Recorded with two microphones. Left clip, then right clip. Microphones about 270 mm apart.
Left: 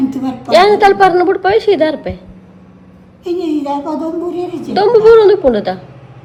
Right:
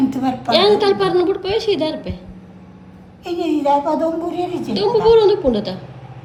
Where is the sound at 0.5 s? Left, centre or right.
Centre.